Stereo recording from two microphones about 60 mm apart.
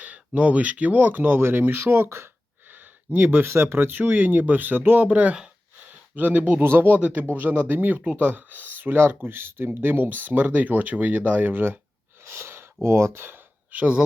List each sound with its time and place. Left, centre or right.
0.0 s speech: right
3.4 s speech: right
12.2 s a sound: right
13.7 s speech: right